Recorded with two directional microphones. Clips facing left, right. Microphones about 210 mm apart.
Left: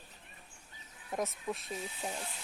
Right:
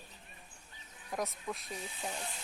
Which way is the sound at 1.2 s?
Centre (ahead or behind).